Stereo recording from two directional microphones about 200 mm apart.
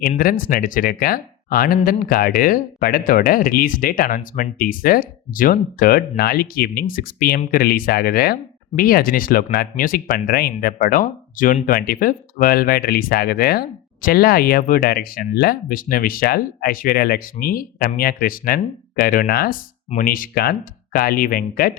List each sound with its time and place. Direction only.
0.2 s speech: 45° left (ahead or behind)